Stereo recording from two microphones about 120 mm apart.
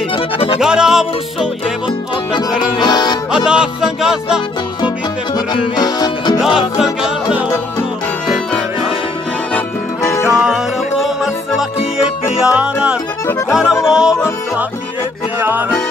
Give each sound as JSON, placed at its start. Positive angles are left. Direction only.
{"t": 0.6, "sound": "music", "side_deg": -5}
{"t": 2.8, "sound": "music", "side_deg": 35}
{"t": 3.4, "sound": "music", "side_deg": -5}
{"t": 5.3, "sound": "music", "side_deg": 35}
{"t": 6.3, "sound": "music", "side_deg": -5}
{"t": 10.2, "sound": "music", "side_deg": -10}